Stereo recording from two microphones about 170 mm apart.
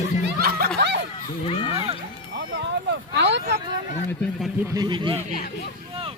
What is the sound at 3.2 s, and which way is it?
Vehicle, 90° right.